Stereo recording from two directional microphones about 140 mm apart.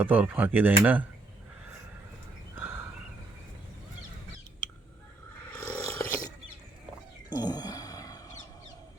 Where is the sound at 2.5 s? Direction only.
15° right (ahead or behind).